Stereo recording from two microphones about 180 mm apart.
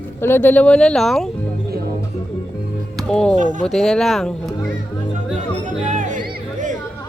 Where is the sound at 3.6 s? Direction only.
Centre (ahead or behind).